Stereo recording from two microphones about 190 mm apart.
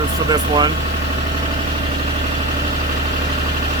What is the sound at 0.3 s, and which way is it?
Speech, 20° right (ahead or behind).